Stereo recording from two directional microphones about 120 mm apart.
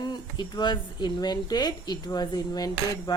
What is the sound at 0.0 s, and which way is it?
A woman's voice, 35° left (ahead or behind).